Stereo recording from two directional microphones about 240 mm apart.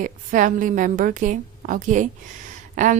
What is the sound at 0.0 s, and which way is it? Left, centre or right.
Speech, right.